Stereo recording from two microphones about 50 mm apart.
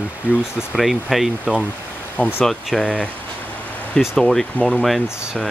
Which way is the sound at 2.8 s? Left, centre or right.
Left.